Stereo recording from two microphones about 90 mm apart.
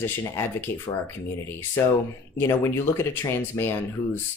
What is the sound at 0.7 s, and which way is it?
Speech, 25° left (ahead or behind).